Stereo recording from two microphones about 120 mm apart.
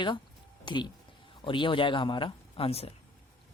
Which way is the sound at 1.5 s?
45° left (ahead or behind).